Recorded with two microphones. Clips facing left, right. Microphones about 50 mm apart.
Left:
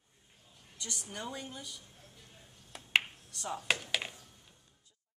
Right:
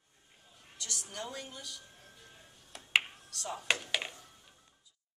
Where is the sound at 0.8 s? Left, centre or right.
Centre.